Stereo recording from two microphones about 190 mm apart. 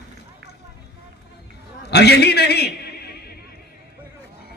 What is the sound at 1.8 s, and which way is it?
A man's voice, 60° left (ahead or behind).